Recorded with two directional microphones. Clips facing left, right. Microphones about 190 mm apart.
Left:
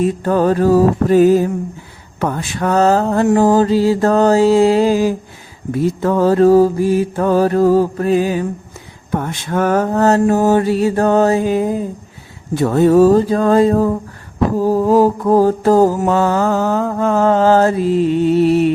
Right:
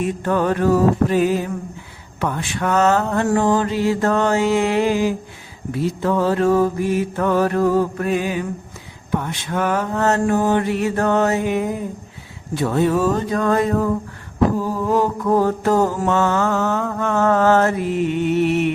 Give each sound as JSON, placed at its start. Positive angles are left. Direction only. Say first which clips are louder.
{"t": 0.0, "sound": "mantra", "louder": "left 5 dB", "side_deg": 35}
{"t": 5.7, "sound": "mantra", "louder": "left 4 dB", "side_deg": 45}
{"t": 9.1, "sound": "mantra", "louder": "left 4 dB", "side_deg": 45}
{"t": 12.5, "sound": "mantra", "louder": "left 8 dB", "side_deg": 45}